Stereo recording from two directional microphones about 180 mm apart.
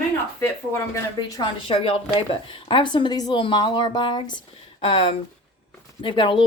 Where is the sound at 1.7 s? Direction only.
30° left (ahead or behind).